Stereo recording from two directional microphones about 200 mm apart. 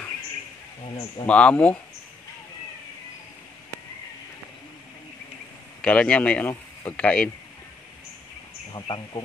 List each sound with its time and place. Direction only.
1.2 s speech: 5° left (ahead or behind)
5.8 s a man's voice: 5° left (ahead or behind)
8.7 s speech: 20° left (ahead or behind)